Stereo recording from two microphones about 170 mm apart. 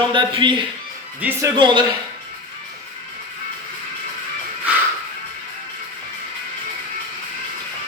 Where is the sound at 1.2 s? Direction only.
10° right (ahead or behind).